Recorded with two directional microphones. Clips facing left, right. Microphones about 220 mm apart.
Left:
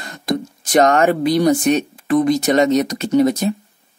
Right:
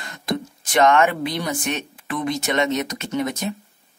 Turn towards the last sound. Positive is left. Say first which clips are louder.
# left 10 dB
turn(degrees=35)  # may be behind; listen again after turning